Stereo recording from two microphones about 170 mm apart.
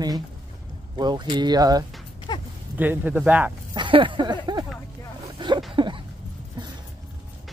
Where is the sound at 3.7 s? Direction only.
30° right (ahead or behind).